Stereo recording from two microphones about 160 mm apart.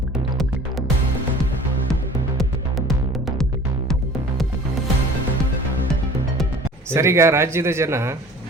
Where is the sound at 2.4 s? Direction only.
Centre (ahead or behind).